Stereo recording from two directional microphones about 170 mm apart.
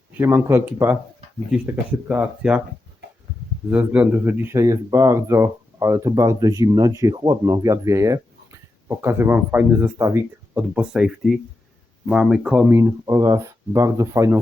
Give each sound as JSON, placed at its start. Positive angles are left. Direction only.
{"t": 0.2, "sound": "speech", "side_deg": -15}
{"t": 3.7, "sound": "speech", "side_deg": -10}